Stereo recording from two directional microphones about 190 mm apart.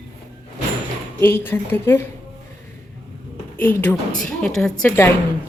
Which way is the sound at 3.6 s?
10° left (ahead or behind).